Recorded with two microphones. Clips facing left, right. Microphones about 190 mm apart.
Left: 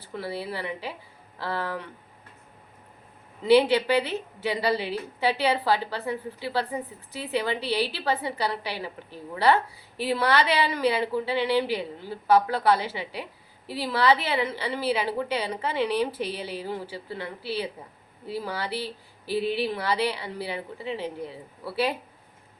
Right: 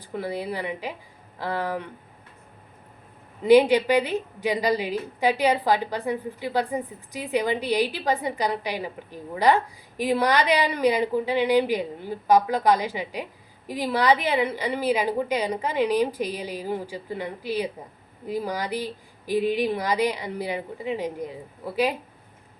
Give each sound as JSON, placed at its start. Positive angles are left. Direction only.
{"t": 0.1, "sound": "a woman's voice", "side_deg": -15}
{"t": 3.4, "sound": "a woman's voice", "side_deg": -15}